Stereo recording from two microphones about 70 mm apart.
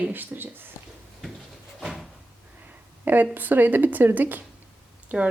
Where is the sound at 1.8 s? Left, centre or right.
Centre.